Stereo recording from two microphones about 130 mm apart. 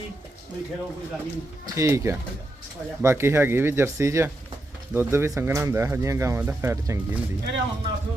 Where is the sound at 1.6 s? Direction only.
20° right (ahead or behind).